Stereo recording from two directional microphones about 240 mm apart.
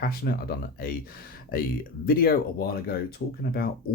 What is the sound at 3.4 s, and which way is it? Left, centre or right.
Speech, left.